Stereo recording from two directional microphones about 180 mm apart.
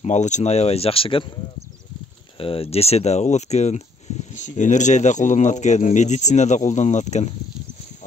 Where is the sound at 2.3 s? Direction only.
30° left (ahead or behind).